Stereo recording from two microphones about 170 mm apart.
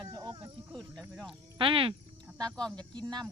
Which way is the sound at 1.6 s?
30° right (ahead or behind).